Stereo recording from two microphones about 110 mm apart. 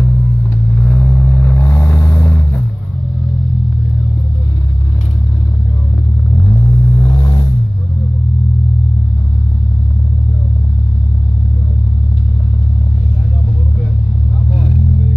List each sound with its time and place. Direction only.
0.7 s vehicle: 15° left (ahead or behind)
6.3 s vehicle: 45° left (ahead or behind)
14.5 s vehicle: 60° left (ahead or behind)